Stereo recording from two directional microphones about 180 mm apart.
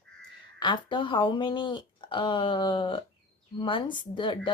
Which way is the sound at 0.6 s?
25° left (ahead or behind).